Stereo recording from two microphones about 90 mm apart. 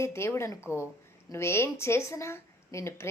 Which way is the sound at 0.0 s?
30° left (ahead or behind).